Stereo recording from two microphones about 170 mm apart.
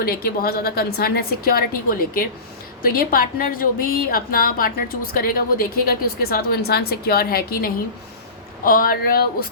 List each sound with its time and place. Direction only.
0.0 s a woman's voice: 60° left (ahead or behind)